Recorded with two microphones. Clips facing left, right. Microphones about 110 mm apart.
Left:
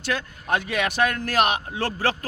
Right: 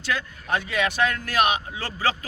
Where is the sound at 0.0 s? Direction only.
55° left (ahead or behind).